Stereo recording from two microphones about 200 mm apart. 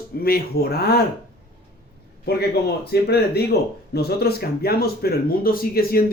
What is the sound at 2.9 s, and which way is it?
A man's voice, 55° left (ahead or behind).